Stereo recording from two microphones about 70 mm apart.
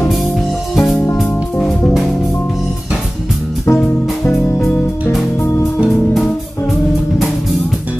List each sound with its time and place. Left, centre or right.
0.7 s music: centre
3.6 s music: left